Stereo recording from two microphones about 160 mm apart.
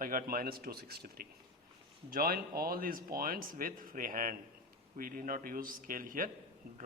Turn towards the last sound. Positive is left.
turn(degrees=-60)  # may be behind; listen again after turning